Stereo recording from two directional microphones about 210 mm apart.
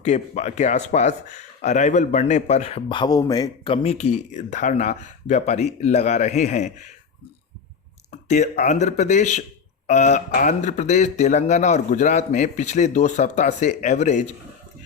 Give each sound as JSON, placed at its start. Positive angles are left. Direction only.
{"t": 0.0, "sound": "speech", "side_deg": 35}
{"t": 8.3, "sound": "speech", "side_deg": 35}